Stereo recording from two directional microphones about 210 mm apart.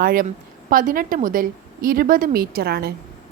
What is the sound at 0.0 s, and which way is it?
A woman's voice, 45° right (ahead or behind).